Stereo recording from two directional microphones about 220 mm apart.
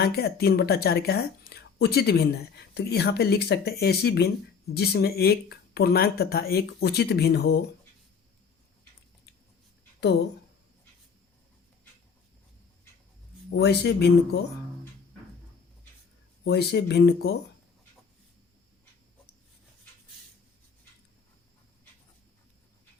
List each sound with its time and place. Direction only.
0.0 s speech: 45° left (ahead or behind)
13.5 s speech: 50° left (ahead or behind)
16.4 s speech: 50° left (ahead or behind)